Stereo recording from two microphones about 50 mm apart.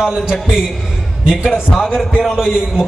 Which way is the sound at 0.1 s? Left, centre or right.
Centre.